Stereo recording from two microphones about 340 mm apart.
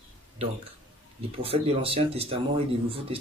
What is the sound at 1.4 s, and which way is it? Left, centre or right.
Speech, centre.